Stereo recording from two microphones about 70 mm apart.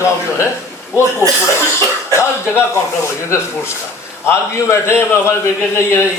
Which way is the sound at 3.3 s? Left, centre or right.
Left.